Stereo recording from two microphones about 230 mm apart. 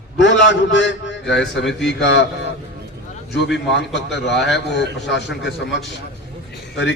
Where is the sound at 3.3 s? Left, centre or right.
Left.